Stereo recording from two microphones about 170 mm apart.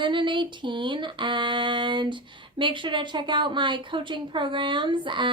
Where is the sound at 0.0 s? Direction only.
30° right (ahead or behind).